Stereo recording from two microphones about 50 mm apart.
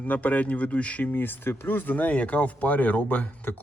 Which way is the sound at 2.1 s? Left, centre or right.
Left.